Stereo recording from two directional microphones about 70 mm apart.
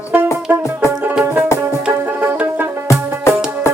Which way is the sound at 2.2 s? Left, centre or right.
Right.